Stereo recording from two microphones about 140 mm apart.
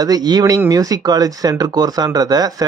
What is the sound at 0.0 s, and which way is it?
Speech, 30° right (ahead or behind).